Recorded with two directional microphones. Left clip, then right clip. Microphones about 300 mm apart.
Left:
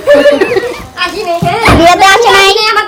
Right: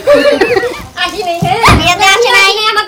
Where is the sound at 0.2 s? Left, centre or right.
Centre.